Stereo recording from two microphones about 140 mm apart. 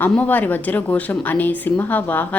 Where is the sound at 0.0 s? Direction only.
10° left (ahead or behind).